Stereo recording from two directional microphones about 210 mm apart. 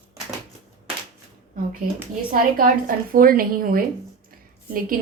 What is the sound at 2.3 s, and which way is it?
A woman's voice, 40° right (ahead or behind).